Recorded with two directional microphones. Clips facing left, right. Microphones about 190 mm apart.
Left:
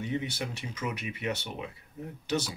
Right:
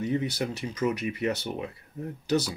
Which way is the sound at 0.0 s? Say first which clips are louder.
Right 5 dB; 40° right (ahead or behind).